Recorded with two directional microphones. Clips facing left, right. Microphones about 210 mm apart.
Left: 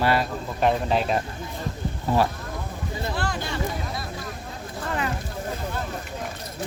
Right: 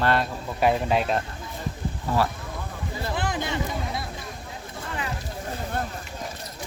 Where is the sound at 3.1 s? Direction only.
20° right (ahead or behind).